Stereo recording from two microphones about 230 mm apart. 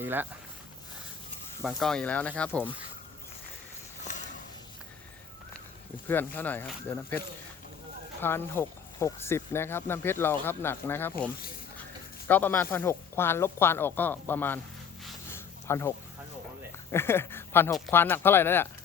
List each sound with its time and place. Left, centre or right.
0.0 s speech: centre
1.6 s speech: centre
4.1 s a sound: left
6.1 s speech: centre
8.2 s speech: centre
12.3 s speech: centre
15.3 s a sound: centre
16.9 s speech: centre